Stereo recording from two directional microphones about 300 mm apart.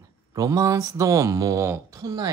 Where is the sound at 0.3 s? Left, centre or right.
Centre.